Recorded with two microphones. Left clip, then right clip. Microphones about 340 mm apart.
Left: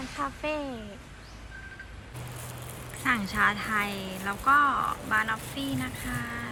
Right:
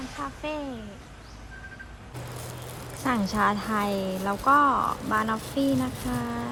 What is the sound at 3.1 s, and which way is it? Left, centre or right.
A woman's voice, centre.